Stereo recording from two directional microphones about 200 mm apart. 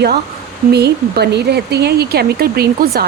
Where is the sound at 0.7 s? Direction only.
55° right (ahead or behind).